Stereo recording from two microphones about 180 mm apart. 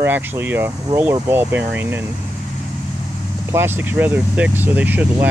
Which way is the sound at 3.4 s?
10° right (ahead or behind).